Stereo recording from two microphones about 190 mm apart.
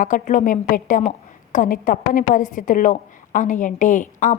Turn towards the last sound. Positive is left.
turn(degrees=40)  # may be behind; listen again after turning